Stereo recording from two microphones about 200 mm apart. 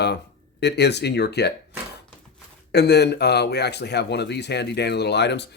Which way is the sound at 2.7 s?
55° left (ahead or behind).